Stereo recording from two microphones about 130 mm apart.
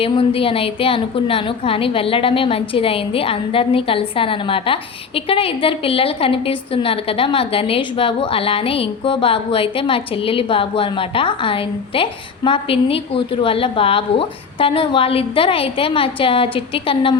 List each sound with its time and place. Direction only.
0.0 s a woman's voice: 45° left (ahead or behind)